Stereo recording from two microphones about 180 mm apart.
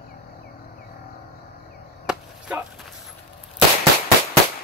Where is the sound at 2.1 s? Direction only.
5° right (ahead or behind).